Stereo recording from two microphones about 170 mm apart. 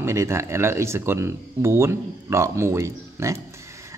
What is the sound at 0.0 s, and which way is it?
Speech, 15° right (ahead or behind).